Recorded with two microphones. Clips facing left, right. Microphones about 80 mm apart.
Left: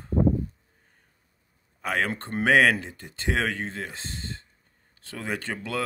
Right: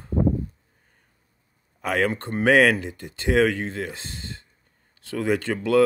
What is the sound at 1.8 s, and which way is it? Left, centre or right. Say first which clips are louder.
Speech: right 4 dB; left.